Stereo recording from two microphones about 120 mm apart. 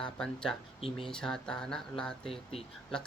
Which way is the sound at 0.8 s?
50° left (ahead or behind).